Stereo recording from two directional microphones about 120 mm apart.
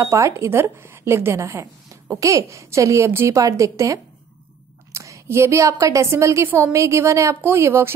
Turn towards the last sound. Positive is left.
turn(degrees=-20)  # may be behind; listen again after turning